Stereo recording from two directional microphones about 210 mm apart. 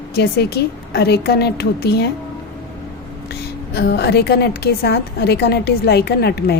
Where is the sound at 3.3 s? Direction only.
50° left (ahead or behind).